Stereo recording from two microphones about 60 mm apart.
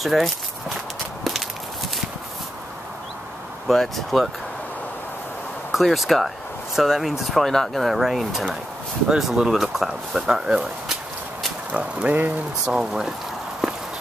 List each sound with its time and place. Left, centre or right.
0.0 s speech: centre
3.6 s speech: centre
5.7 s speech: centre
11.7 s speech: right
12.6 s speech: centre